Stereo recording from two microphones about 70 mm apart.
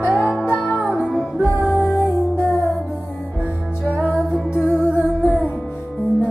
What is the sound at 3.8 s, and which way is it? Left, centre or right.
Music, left.